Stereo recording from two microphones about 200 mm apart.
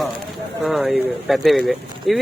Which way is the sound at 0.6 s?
Centre (ahead or behind).